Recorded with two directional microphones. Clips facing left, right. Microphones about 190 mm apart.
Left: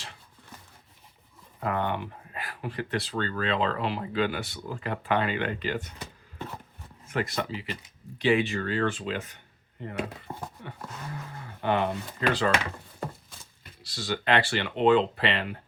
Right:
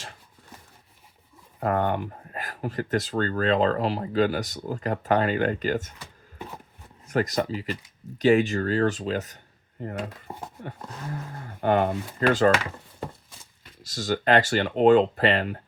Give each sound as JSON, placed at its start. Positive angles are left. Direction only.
{"t": 1.5, "sound": "speech", "side_deg": -45}
{"t": 7.1, "sound": "speech", "side_deg": -40}
{"t": 10.3, "sound": "dog", "side_deg": -15}
{"t": 11.4, "sound": "a sound", "side_deg": -45}
{"t": 12.2, "sound": "speech", "side_deg": -45}
{"t": 13.8, "sound": "speech", "side_deg": -45}